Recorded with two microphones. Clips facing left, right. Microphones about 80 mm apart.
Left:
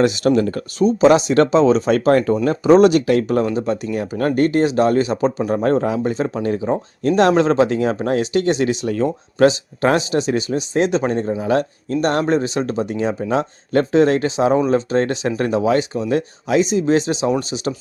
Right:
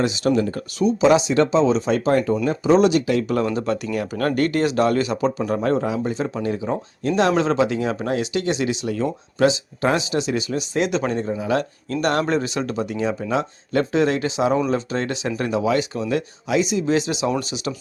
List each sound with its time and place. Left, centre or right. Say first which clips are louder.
0.0 s speech: left 4 dB; left
0.8 s speech: left 3 dB; left
3.3 s speech: left 3 dB; left
5.6 s speech: left 4 dB; left
11.9 s speech: left 3 dB; left